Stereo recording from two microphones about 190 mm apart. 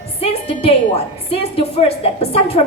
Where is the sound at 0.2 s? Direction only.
30° left (ahead or behind).